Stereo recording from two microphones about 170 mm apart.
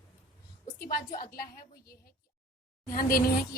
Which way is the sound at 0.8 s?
55° left (ahead or behind).